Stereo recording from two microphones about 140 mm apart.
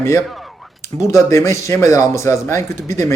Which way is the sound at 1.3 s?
20° left (ahead or behind).